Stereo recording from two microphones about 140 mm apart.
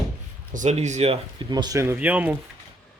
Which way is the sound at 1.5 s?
30° right (ahead or behind).